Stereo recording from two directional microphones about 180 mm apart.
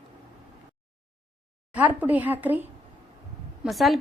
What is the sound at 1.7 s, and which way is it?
A woman's voice, 10° right (ahead or behind).